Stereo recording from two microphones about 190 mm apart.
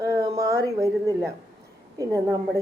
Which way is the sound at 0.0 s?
15° right (ahead or behind).